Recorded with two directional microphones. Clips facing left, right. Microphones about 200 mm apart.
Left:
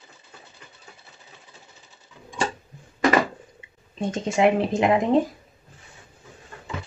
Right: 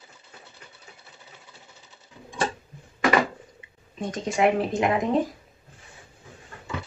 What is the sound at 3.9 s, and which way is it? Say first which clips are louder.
Speech: left 2 dB; 25° left (ahead or behind).